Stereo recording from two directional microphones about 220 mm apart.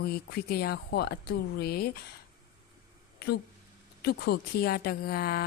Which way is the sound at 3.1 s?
45° left (ahead or behind).